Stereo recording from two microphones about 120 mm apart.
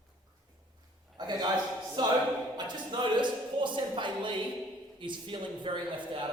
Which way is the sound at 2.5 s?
40° right (ahead or behind).